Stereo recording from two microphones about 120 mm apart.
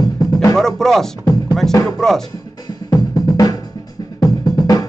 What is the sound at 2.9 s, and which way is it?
Drum, 30° left (ahead or behind).